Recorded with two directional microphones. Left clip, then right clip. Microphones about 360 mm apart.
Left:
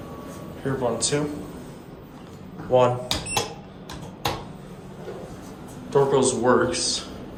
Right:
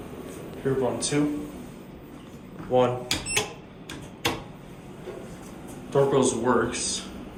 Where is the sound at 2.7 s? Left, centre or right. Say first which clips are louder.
Left 3 dB; centre.